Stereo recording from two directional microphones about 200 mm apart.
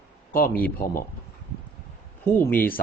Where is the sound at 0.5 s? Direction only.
10° left (ahead or behind).